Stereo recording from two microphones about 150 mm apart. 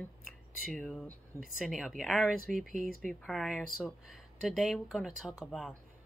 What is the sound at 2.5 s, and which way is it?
Speech, 60° right (ahead or behind).